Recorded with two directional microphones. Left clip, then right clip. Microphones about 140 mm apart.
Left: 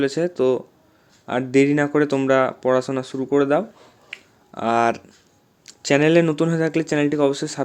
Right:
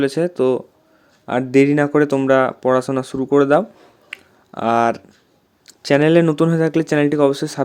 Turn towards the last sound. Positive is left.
turn(degrees=-25)  # may be behind; listen again after turning